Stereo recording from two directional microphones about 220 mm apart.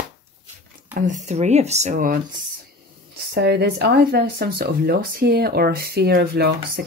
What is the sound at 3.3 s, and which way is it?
Speech, 50° right (ahead or behind).